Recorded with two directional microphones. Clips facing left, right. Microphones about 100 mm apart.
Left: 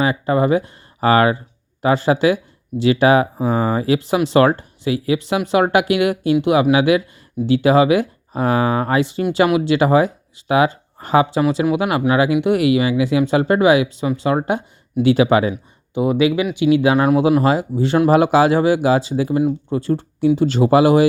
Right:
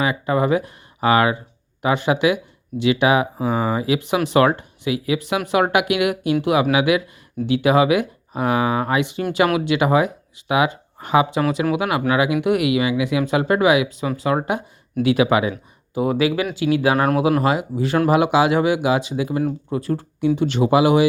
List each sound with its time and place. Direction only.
0.0 s speech: 35° left (ahead or behind)
16.0 s speech: 20° left (ahead or behind); by 21.1 s 40° left (ahead or behind)